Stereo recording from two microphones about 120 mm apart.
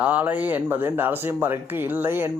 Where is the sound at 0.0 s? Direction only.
15° right (ahead or behind).